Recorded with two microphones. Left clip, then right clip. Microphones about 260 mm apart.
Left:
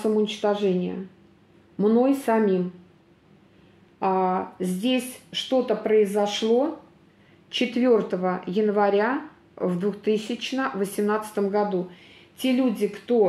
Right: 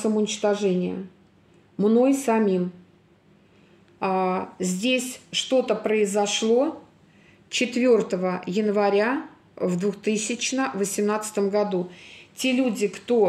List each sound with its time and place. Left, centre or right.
0.2 s speech: right
4.0 s speech: right